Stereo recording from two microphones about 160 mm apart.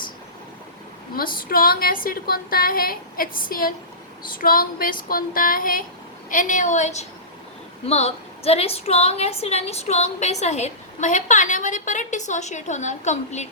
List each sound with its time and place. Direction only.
1.1 s a woman's voice: 65° left (ahead or behind); by 13.5 s 45° left (ahead or behind)